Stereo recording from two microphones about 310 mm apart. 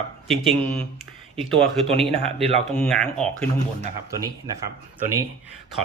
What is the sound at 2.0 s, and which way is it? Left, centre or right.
Speech, centre.